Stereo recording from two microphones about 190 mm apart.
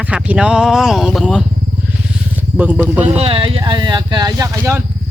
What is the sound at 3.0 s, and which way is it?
Speech, 30° right (ahead or behind).